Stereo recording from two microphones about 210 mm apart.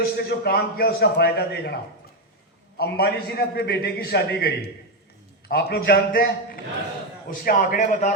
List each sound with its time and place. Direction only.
0.2 s a man's voice: 50° left (ahead or behind)
2.7 s a man's voice: 50° left (ahead or behind)